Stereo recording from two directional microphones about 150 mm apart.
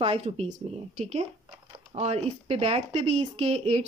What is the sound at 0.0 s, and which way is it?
Speech, 40° right (ahead or behind).